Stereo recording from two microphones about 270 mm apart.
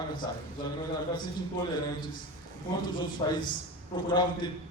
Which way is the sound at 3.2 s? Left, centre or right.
Centre.